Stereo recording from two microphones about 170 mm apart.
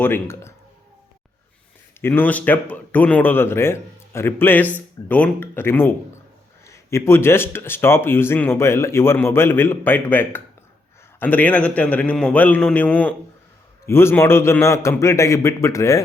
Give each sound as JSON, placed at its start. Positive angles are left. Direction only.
{"t": 0.0, "sound": "speech", "side_deg": 15}
{"t": 2.0, "sound": "speech", "side_deg": 10}